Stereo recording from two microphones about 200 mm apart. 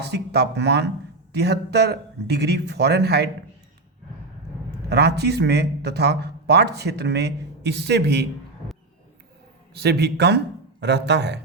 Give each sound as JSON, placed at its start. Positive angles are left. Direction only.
{"t": 0.0, "sound": "a man's voice", "side_deg": -55}
{"t": 4.9, "sound": "a man's voice", "side_deg": -55}
{"t": 9.7, "sound": "a man's voice", "side_deg": -55}